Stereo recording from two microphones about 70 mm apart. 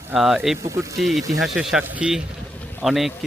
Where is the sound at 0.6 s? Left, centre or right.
Right.